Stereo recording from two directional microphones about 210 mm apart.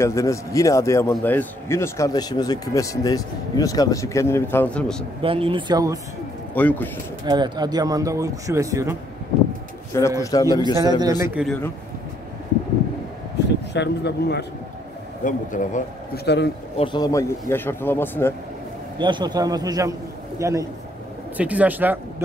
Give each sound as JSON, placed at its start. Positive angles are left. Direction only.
{"t": 0.0, "sound": "speech", "side_deg": 15}
{"t": 5.2, "sound": "a man's voice", "side_deg": -25}
{"t": 6.5, "sound": "speech", "side_deg": 10}
{"t": 7.2, "sound": "speech", "side_deg": -20}
{"t": 10.2, "sound": "speech", "side_deg": 15}
{"t": 10.5, "sound": "speech", "side_deg": -20}
{"t": 13.7, "sound": "speech", "side_deg": 55}
{"t": 15.2, "sound": "a man's voice", "side_deg": 35}
{"t": 16.3, "sound": "speech", "side_deg": 55}
{"t": 16.7, "sound": "speech", "side_deg": 20}
{"t": 18.9, "sound": "a man's voice", "side_deg": -20}